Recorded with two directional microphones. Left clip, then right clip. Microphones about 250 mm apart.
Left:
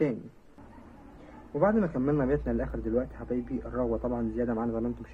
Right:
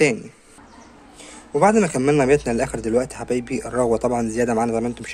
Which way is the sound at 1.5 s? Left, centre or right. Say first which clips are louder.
Right 10 dB; right.